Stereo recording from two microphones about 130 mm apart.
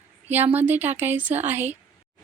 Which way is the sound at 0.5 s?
15° right (ahead or behind).